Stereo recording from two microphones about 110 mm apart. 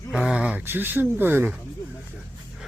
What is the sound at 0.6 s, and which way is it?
Speech, 20° right (ahead or behind).